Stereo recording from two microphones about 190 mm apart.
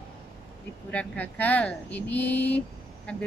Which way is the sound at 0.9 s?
10° left (ahead or behind).